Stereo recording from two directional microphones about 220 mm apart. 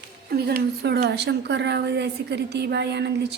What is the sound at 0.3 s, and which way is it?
A woman's voice, 45° right (ahead or behind).